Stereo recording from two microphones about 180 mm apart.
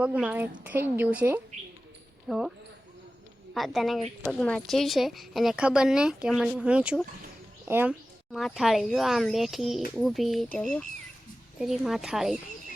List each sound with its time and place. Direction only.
0.0 s a woman's voice: 10° right (ahead or behind)
3.5 s a woman's voice: centre (ahead or behind)
8.3 s a woman's voice: centre (ahead or behind)